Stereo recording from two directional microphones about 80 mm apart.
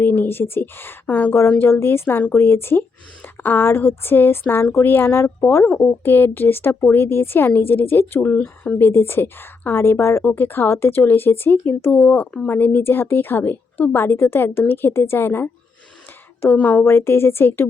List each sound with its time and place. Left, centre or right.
0.0 s a woman's voice: left
5.6 s a woman's voice: left
8.4 s speech: centre
8.8 s a woman's voice: left
16.8 s a woman's voice: left